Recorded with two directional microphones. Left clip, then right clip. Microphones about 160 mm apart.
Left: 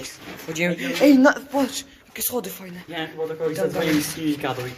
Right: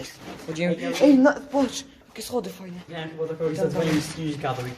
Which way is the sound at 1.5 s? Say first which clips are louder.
Left 1 dB; 20° right (ahead or behind).